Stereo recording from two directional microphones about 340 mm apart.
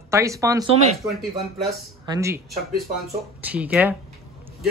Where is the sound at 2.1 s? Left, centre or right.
Centre.